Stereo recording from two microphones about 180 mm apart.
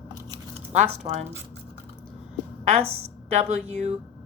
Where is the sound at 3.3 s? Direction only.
40° right (ahead or behind).